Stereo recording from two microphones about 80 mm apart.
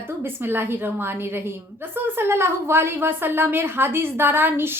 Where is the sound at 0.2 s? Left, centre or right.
Right.